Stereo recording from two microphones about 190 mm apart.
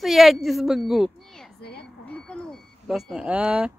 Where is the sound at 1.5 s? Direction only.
60° left (ahead or behind).